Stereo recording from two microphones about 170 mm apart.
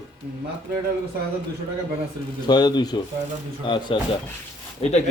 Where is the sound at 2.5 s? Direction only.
25° left (ahead or behind).